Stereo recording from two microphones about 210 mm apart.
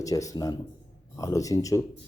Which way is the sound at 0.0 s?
15° left (ahead or behind).